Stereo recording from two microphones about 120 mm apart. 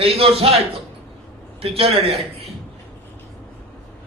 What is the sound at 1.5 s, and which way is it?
Speech, 55° right (ahead or behind).